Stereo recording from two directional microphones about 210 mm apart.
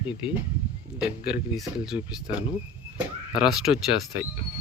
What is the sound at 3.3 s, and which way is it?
Speech, 20° left (ahead or behind).